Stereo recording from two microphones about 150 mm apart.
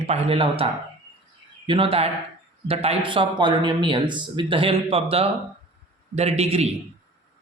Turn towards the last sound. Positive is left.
turn(degrees=-45)  # may be behind; listen again after turning